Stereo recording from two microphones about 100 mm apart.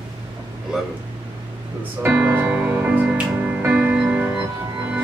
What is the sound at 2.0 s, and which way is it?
Music, 20° right (ahead or behind).